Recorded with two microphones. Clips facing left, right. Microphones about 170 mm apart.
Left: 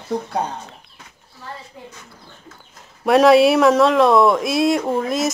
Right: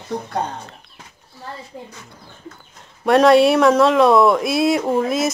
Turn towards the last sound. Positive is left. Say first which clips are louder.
# right 2 dB
turn(degrees=0)  # may be behind; listen again after turning